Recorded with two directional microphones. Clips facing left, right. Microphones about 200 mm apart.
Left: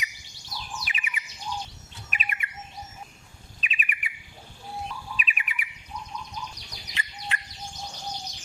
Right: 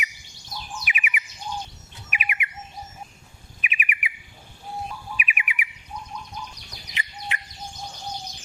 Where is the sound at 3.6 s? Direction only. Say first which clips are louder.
Right 3 dB; 15° right (ahead or behind).